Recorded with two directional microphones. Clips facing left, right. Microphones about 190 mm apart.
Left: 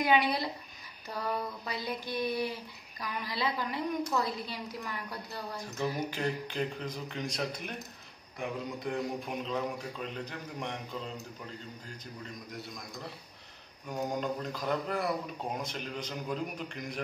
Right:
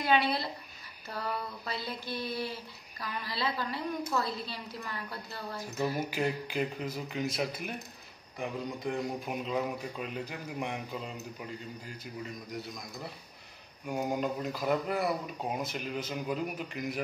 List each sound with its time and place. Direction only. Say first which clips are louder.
0.0 s a sound: left 1 dB; 15° left (ahead or behind)
5.9 s a man's voice: right 2 dB; 10° right (ahead or behind)
13.8 s a man's voice: right 2 dB; 10° right (ahead or behind)